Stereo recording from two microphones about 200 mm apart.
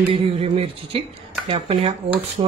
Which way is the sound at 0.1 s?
30° right (ahead or behind).